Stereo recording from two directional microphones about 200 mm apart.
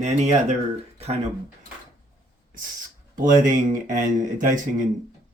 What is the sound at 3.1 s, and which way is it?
Speech, 40° right (ahead or behind).